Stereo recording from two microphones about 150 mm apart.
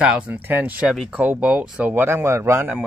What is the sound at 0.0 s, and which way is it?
Speech, 10° right (ahead or behind).